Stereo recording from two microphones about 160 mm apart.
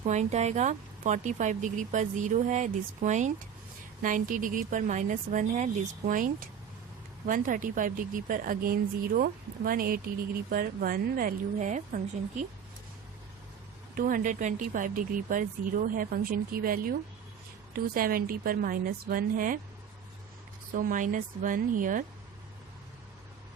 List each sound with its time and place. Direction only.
0.0 s a woman's voice: 45° right (ahead or behind)
13.9 s a woman's voice: 60° right (ahead or behind)
20.7 s a woman's voice: 55° right (ahead or behind)